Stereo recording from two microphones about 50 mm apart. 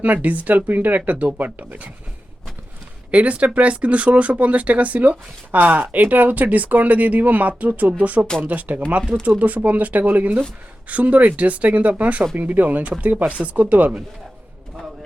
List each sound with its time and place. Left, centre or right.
0.0 s speech: right
3.1 s speech: right